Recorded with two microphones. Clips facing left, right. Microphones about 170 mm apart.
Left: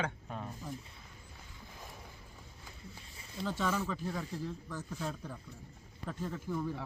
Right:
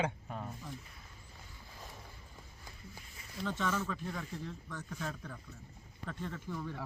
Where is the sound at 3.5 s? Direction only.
10° left (ahead or behind).